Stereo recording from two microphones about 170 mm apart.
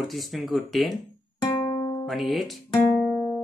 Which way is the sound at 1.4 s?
30° left (ahead or behind).